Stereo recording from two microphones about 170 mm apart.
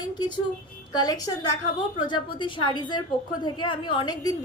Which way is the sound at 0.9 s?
20° left (ahead or behind).